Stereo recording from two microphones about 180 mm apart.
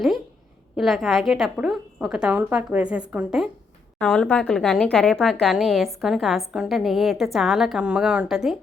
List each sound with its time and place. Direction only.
0.8 s a woman's voice: centre (ahead or behind)